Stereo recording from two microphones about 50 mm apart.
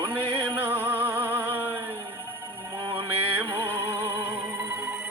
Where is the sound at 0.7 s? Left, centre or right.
Right.